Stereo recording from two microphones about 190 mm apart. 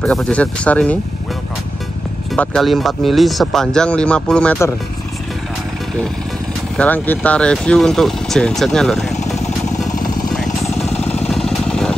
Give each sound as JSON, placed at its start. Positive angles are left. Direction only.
{"t": 0.0, "sound": "speech", "side_deg": 5}
{"t": 2.3, "sound": "speech", "side_deg": 5}
{"t": 6.8, "sound": "speech", "side_deg": 10}
{"t": 10.3, "sound": "vehicle", "side_deg": 0}